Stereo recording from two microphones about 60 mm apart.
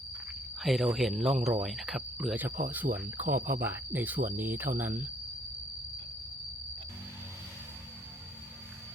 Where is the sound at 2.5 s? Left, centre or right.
Right.